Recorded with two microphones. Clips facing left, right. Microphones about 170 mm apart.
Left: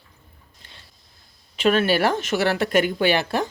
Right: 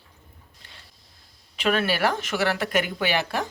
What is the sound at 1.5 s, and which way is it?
Speech, 25° left (ahead or behind).